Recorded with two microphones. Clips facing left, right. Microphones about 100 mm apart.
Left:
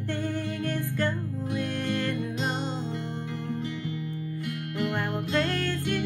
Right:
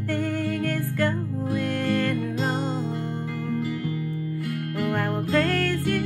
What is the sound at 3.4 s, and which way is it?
Music, 45° right (ahead or behind).